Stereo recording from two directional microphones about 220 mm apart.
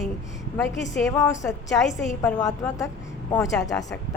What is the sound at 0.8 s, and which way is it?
A woman's voice, 15° left (ahead or behind).